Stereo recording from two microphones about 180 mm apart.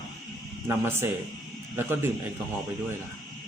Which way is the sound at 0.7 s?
15° right (ahead or behind).